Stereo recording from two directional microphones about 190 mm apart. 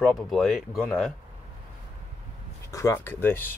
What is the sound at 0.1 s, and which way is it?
Speech, centre (ahead or behind).